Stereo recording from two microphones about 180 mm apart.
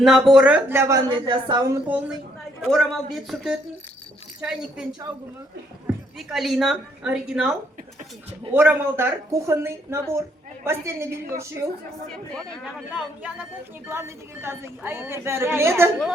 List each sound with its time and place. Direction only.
0.0 s a woman's voice: centre (ahead or behind); by 1.8 s 20° right (ahead or behind)
1.9 s a woman's voice: 10° right (ahead or behind)
6.1 s a woman's voice: centre (ahead or behind)
8.5 s a woman's voice: 10° right (ahead or behind)
12.3 s a woman's voice: centre (ahead or behind)
13.8 s a woman's voice: 15° right (ahead or behind)